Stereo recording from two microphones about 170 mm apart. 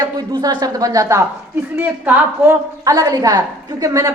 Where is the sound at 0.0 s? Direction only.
25° right (ahead or behind).